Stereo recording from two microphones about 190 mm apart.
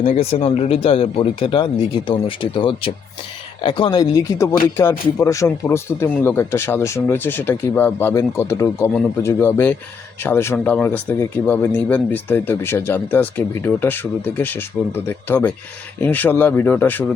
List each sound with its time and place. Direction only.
0.1 s speech: 35° left (ahead or behind); by 17.1 s 10° left (ahead or behind)